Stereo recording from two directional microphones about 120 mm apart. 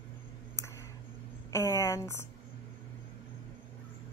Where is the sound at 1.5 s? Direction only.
25° left (ahead or behind).